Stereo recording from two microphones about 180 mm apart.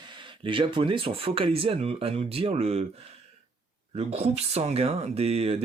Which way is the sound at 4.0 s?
35° right (ahead or behind).